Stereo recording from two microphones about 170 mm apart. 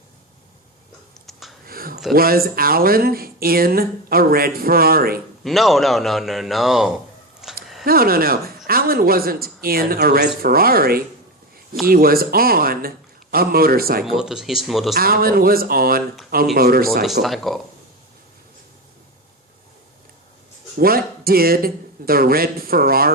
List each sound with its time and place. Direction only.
1.3 s a sound: centre (ahead or behind)
1.6 s a sound: 60° right (ahead or behind)
2.1 s speech: 60° right (ahead or behind)
5.4 s a man's voice: centre (ahead or behind)
7.6 s a sound: centre (ahead or behind)
7.9 s speech: 60° right (ahead or behind)
14.0 s a man's voice: 5° right (ahead or behind)
14.9 s speech: 60° right (ahead or behind)
17.0 s a man's voice: centre (ahead or behind)
20.7 s speech: 60° right (ahead or behind)